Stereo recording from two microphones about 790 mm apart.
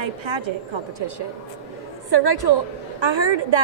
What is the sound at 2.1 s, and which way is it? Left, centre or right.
A woman's voice, right.